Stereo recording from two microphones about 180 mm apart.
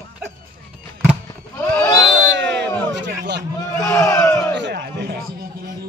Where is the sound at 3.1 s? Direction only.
65° right (ahead or behind).